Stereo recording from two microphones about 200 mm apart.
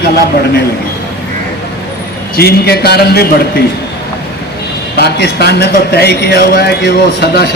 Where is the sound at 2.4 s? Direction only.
50° left (ahead or behind).